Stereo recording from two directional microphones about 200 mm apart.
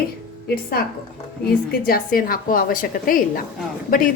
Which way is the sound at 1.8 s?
45° left (ahead or behind).